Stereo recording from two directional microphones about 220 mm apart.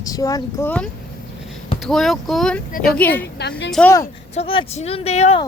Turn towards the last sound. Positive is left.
turn(degrees=30)  # may be behind; listen again after turning